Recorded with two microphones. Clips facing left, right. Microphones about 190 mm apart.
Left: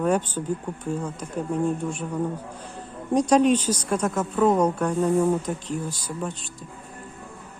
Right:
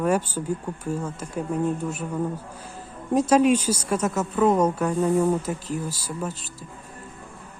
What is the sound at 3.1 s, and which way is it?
Speech, 5° right (ahead or behind).